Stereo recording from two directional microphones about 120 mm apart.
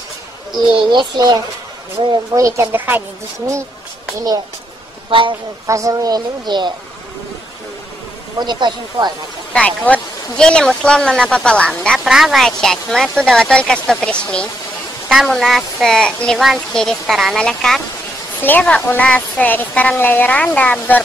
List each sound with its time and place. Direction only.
0.5 s speech: 40° right (ahead or behind); by 3.0 s 15° right (ahead or behind)
5.1 s speech: 45° right (ahead or behind)
5.7 s speech: 30° right (ahead or behind)
8.4 s speech: 40° right (ahead or behind)
9.5 s speech: 10° left (ahead or behind)